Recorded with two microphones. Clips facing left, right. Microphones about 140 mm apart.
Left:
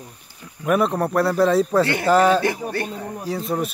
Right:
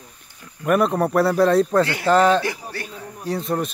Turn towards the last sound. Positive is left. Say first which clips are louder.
# even
turn(degrees=0)  # may be behind; listen again after turning